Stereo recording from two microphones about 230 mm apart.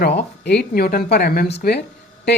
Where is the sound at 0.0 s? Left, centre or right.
Left.